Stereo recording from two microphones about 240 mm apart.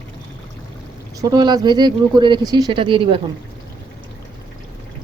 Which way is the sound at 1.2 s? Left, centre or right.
Centre.